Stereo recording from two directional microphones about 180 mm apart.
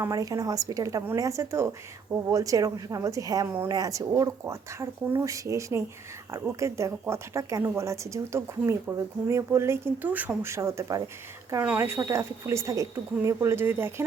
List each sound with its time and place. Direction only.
0.0 s a woman's voice: 20° right (ahead or behind)